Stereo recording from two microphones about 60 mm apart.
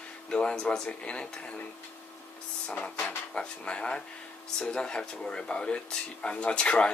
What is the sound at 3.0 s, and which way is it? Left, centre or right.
Speech, centre.